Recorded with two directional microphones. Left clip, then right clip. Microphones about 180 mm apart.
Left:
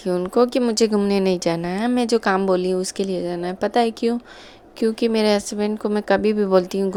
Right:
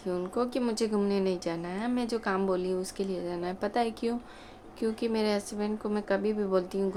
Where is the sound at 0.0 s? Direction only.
45° left (ahead or behind).